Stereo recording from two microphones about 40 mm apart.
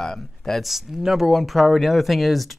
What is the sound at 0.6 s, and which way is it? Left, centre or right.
Speech, centre.